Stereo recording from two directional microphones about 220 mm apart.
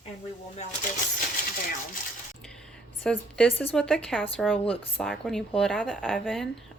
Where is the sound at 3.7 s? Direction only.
Centre (ahead or behind).